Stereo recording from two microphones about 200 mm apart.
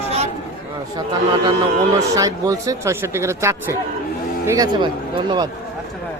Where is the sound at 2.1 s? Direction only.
15° right (ahead or behind).